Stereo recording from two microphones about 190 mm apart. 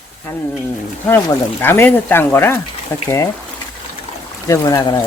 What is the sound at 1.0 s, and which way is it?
Speech, 10° left (ahead or behind).